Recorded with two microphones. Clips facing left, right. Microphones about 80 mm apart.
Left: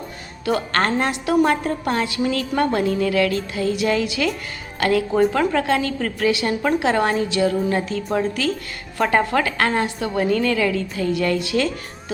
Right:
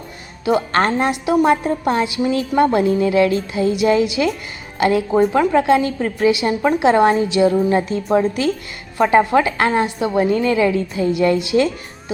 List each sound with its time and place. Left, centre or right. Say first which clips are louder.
0.4 s a woman's voice: right 4 dB; centre